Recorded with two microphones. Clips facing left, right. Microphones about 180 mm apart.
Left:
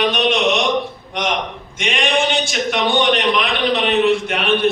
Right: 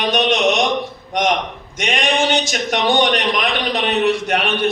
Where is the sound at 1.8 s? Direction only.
40° right (ahead or behind).